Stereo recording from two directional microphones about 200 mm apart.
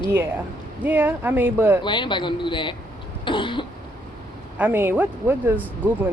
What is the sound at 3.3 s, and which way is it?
Cough, 25° left (ahead or behind).